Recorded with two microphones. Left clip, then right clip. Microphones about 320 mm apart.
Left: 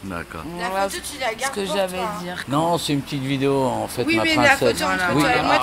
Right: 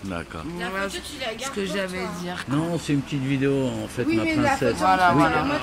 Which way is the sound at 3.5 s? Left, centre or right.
Left.